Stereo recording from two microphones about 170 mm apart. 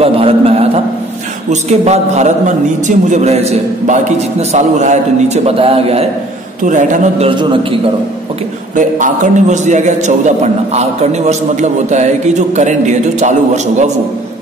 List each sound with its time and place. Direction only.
0.0 s a sound: 35° right (ahead or behind)
1.5 s a man's voice: 40° right (ahead or behind)
6.6 s a man's voice: 50° right (ahead or behind)
7.2 s a man's voice: 30° right (ahead or behind)
8.7 s a man's voice: 50° right (ahead or behind)